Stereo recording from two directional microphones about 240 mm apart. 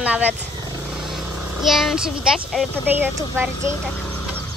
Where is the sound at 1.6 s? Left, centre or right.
Centre.